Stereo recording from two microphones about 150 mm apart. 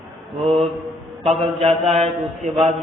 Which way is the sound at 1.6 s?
40° right (ahead or behind).